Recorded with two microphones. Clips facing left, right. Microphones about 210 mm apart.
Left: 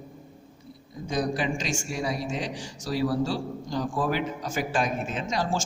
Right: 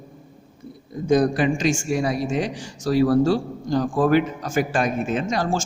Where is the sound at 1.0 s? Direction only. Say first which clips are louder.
Right 9 dB; 55° right (ahead or behind).